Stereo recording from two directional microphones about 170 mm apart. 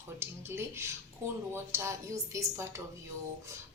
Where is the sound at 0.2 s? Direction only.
15° right (ahead or behind).